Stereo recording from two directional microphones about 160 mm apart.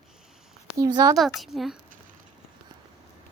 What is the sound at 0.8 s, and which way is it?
Speech, 25° right (ahead or behind).